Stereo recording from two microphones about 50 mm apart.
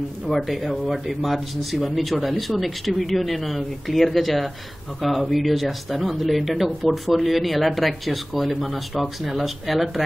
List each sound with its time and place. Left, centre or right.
0.5 s speech: centre